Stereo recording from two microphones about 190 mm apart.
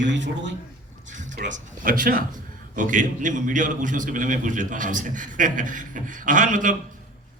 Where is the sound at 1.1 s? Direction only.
40° right (ahead or behind).